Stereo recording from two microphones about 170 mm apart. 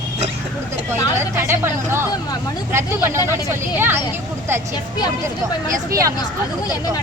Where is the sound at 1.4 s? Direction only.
15° right (ahead or behind).